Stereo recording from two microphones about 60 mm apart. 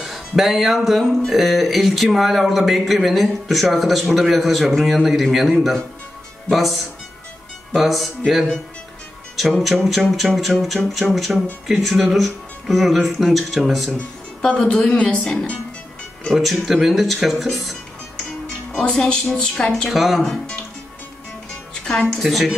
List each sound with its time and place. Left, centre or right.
0.0 s speech: centre
14.4 s speech: centre
16.3 s speech: centre
18.7 s speech: centre
21.7 s music: centre
22.2 s speech: centre